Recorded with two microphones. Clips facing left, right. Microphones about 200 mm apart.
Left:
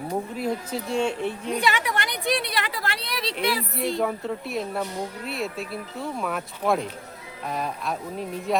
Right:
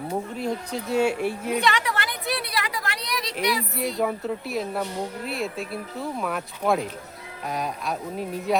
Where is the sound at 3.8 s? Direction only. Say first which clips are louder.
Even; centre (ahead or behind).